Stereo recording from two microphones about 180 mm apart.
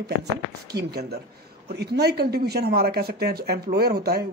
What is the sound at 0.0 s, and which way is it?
Speech, 65° right (ahead or behind).